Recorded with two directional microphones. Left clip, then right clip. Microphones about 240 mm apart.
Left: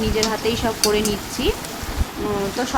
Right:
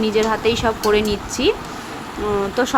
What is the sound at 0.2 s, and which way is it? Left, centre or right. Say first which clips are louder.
Speech: right 4 dB; centre.